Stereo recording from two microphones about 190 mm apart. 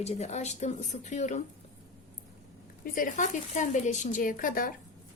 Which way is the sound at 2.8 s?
45° left (ahead or behind).